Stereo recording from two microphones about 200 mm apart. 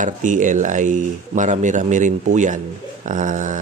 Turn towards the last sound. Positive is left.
turn(degrees=-40)  # may be behind; listen again after turning